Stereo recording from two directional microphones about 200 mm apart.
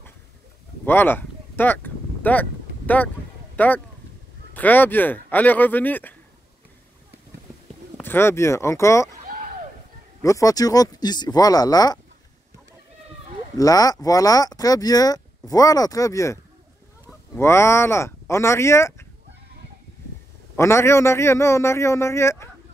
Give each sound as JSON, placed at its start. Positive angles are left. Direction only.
{"t": 0.8, "sound": "a sound", "side_deg": 10}
{"t": 2.9, "sound": "speech", "side_deg": 10}
{"t": 8.0, "sound": "speech", "side_deg": 10}
{"t": 10.2, "sound": "speech", "side_deg": 15}
{"t": 13.6, "sound": "speech", "side_deg": 15}
{"t": 17.4, "sound": "speech", "side_deg": 15}
{"t": 20.5, "sound": "speech", "side_deg": 15}